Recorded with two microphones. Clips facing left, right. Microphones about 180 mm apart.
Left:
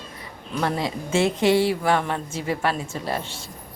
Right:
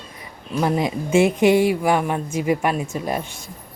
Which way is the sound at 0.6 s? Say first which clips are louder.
Right 4 dB; 15° right (ahead or behind).